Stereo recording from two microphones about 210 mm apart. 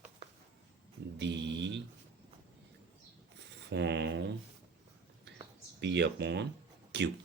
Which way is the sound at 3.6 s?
55° right (ahead or behind).